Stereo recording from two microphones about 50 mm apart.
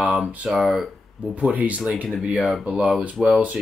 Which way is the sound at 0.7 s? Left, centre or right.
Centre.